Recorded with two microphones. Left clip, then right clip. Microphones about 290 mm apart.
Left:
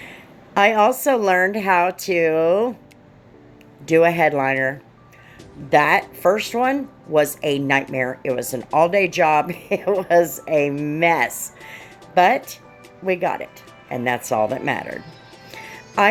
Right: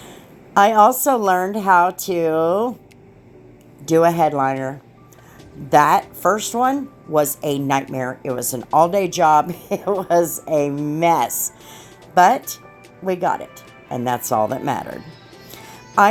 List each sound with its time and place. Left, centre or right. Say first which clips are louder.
0.5 s a woman's voice: right 3 dB; right
3.8 s a woman's voice: even; right